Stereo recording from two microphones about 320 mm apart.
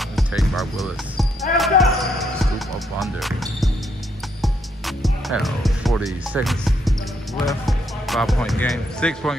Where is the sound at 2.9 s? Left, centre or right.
Centre.